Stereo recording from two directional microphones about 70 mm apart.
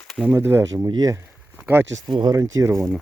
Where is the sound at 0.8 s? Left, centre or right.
Right.